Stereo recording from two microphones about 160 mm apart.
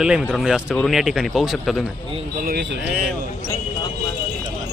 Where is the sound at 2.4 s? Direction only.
80° right.